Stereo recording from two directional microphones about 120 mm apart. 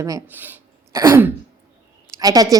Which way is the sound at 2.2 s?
30° right (ahead or behind).